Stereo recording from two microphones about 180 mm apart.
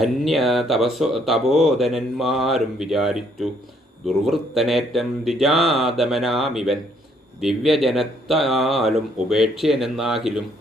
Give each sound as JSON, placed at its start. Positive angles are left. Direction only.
{"t": 0.0, "sound": "speech", "side_deg": 0}